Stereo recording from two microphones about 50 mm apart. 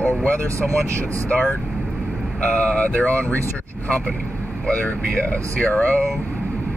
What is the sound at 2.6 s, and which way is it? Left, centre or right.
Speech, left.